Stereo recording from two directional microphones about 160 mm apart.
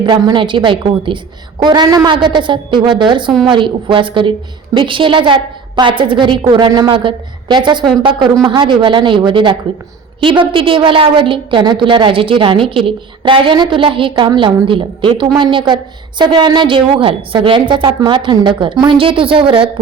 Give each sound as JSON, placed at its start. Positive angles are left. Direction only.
{"t": 0.0, "sound": "a woman's voice", "side_deg": -30}